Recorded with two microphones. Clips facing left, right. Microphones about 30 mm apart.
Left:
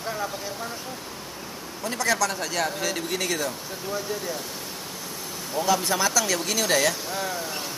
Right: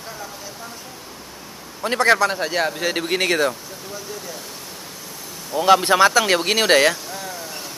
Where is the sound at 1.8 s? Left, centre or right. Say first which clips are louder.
Right 8 dB; right.